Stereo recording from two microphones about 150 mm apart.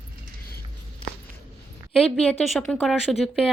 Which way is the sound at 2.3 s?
5° left (ahead or behind).